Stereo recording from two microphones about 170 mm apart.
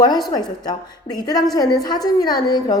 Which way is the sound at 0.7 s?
25° left (ahead or behind).